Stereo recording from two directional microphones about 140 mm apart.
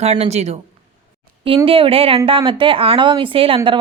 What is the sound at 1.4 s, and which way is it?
A woman's voice, 40° right (ahead or behind).